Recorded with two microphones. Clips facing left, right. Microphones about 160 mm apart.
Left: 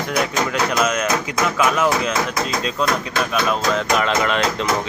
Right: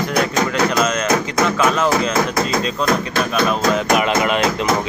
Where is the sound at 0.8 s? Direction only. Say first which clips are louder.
Right 2 dB; 5° left (ahead or behind).